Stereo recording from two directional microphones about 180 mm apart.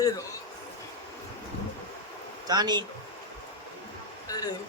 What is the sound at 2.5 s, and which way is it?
Speech, 20° right (ahead or behind).